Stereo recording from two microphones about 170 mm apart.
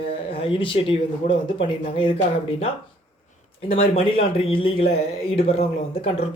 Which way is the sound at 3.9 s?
35° left (ahead or behind).